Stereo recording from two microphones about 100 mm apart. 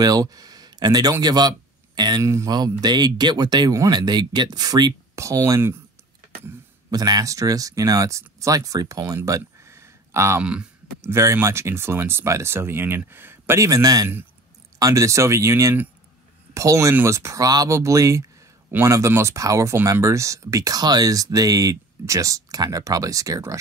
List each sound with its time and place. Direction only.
0.0 s speech: 40° right (ahead or behind)
2.2 s speech: 35° right (ahead or behind)
5.1 s speech: 30° right (ahead or behind)
6.9 s speech: 40° right (ahead or behind)
10.4 s speech: 10° right (ahead or behind)
11.0 s speech: 25° right (ahead or behind)